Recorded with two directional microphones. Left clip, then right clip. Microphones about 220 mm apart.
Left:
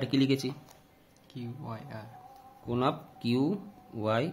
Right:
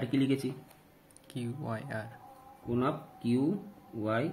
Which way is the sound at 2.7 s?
45° left (ahead or behind).